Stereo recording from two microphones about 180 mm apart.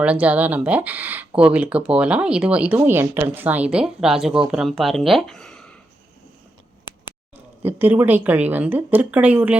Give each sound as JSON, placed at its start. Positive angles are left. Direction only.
{"t": 0.0, "sound": "speech", "side_deg": -5}
{"t": 7.3, "sound": "speech", "side_deg": -10}